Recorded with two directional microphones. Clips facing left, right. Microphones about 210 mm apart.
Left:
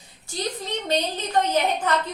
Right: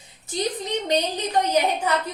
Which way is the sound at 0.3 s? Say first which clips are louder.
Right 3 dB; 20° right (ahead or behind).